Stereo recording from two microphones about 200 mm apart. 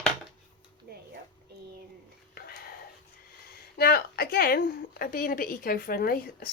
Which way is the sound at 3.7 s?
50° left (ahead or behind).